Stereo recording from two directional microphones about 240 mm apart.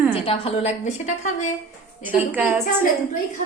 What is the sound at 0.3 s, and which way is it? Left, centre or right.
A woman's voice, left.